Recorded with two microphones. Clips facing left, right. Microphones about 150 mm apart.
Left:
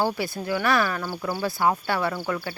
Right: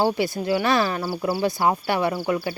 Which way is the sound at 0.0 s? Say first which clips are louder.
Right 4 dB; 20° right (ahead or behind).